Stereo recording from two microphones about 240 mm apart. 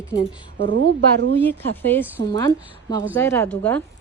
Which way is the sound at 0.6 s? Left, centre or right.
Right.